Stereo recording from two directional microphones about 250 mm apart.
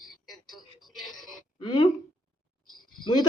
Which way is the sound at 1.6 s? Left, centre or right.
Centre.